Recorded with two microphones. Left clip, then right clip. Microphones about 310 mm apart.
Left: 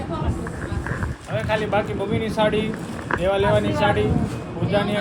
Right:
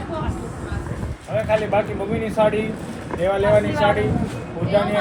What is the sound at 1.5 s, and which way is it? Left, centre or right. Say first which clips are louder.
Speech: right 2 dB; centre.